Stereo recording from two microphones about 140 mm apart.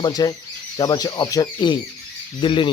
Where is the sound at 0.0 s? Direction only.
30° left (ahead or behind).